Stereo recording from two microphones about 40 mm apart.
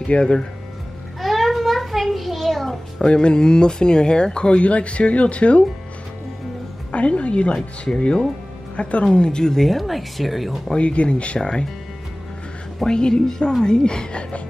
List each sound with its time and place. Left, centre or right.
0.1 s speech: left
1.2 s a sound: centre
3.0 s speech: left
6.9 s a woman's voice: left; by 9.7 s centre
9.7 s speech: centre
10.8 s speech: left
12.8 s speech: centre